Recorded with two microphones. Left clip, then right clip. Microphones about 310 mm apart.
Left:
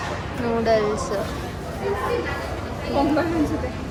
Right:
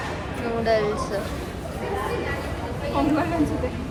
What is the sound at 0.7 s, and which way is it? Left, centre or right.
Speech, centre.